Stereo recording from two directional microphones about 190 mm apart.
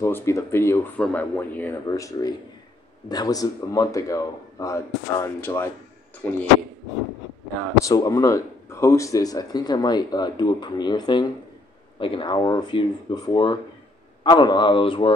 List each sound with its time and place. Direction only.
0.0 s a man's voice: 15° left (ahead or behind)
7.8 s speech: 15° left (ahead or behind)